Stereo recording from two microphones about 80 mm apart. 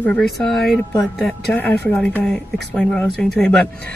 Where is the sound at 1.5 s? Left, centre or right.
Left.